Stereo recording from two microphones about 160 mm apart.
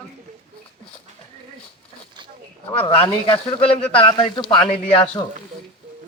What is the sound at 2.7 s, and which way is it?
Speech, 35° left (ahead or behind).